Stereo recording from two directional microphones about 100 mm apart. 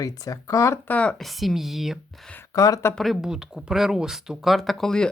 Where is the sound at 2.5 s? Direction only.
35° left (ahead or behind).